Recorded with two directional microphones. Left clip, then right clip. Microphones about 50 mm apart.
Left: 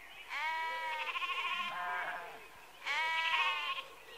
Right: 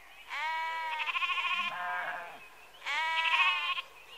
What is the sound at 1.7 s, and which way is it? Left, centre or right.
Sheep, centre.